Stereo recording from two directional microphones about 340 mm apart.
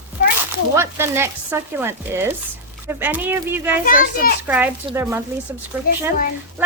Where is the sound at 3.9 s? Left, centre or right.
Left.